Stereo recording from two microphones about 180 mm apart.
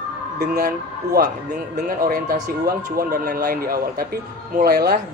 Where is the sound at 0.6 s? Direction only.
60° right (ahead or behind).